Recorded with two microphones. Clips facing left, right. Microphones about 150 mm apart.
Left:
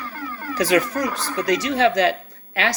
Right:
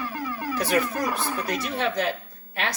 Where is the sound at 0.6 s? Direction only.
90° left.